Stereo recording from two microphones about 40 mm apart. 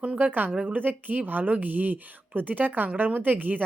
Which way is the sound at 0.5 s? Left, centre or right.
Right.